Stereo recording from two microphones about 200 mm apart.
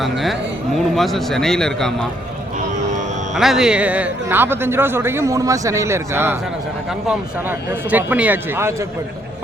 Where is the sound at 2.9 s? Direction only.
35° right (ahead or behind).